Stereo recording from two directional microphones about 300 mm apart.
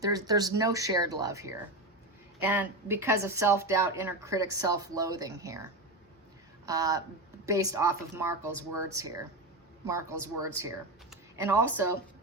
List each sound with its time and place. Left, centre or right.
0.0 s speech: centre
6.7 s speech: centre